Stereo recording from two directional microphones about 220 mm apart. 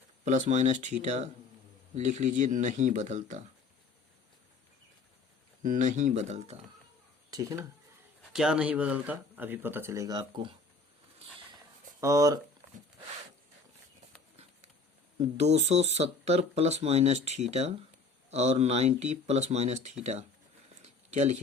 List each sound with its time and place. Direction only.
0.3 s speech: 30° right (ahead or behind)
5.6 s speech: 35° right (ahead or behind)
7.3 s speech: 15° right (ahead or behind)
8.3 s speech: 5° right (ahead or behind); by 10.5 s 20° right (ahead or behind)
11.9 s speech: 15° right (ahead or behind)
15.2 s speech: 30° right (ahead or behind)